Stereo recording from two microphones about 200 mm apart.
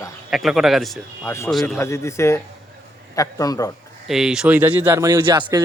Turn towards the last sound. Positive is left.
turn(degrees=-20)  # may be behind; listen again after turning